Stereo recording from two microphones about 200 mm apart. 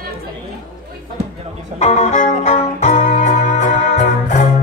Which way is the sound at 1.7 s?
35° left (ahead or behind).